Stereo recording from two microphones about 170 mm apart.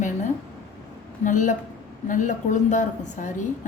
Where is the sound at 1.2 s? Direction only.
50° left (ahead or behind).